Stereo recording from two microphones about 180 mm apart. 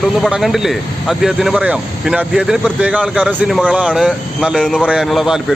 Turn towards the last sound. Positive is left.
turn(degrees=0)  # may be behind; listen again after turning